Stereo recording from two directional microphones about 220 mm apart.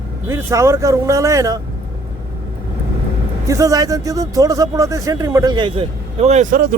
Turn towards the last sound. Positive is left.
turn(degrees=-35)  # may be behind; listen again after turning